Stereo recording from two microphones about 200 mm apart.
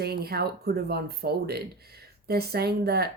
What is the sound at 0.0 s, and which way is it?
Speech, 50° right (ahead or behind).